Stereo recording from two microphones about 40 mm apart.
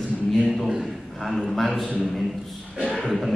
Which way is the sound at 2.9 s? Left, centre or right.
Centre.